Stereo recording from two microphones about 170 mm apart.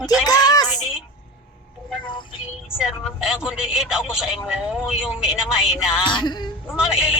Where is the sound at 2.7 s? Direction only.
5° right (ahead or behind).